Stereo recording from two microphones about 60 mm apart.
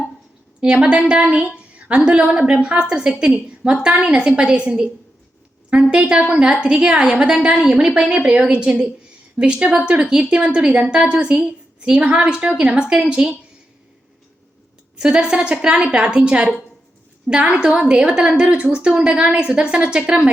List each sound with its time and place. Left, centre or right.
0.6 s a woman's voice: centre
5.9 s a woman's voice: centre
14.9 s a woman's voice: centre